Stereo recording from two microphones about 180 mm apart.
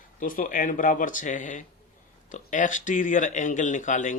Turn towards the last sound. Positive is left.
turn(degrees=45)  # may be behind; listen again after turning